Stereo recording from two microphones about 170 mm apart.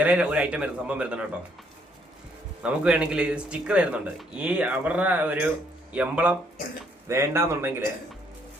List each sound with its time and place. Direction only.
0.0 s speech: 5° right (ahead or behind)
2.6 s speech: 5° right (ahead or behind)